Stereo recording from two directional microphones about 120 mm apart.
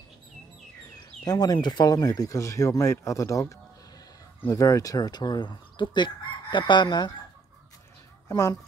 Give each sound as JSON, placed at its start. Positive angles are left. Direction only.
{"t": 0.9, "sound": "speech", "side_deg": 35}
{"t": 8.3, "sound": "speech", "side_deg": 30}